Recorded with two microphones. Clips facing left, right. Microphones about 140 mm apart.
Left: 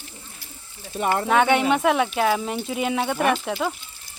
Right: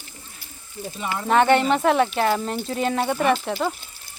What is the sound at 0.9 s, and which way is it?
Speech, 55° left (ahead or behind).